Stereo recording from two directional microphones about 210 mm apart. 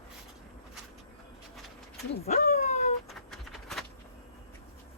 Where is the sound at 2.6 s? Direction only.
30° left (ahead or behind).